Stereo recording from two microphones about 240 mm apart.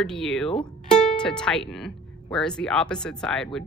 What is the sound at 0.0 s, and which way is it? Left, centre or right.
Speech, centre.